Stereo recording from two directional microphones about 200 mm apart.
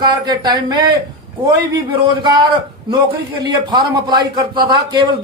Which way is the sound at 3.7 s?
20° right (ahead or behind).